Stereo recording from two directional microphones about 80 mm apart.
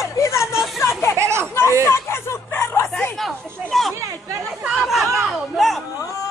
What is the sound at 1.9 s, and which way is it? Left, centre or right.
Speech, left.